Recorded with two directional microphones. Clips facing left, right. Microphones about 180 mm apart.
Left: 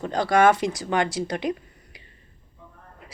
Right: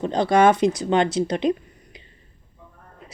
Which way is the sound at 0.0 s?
20° right (ahead or behind).